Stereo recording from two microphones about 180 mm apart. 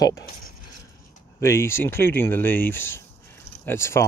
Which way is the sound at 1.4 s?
15° left (ahead or behind).